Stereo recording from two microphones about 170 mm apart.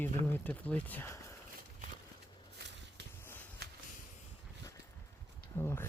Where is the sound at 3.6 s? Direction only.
70° right (ahead or behind).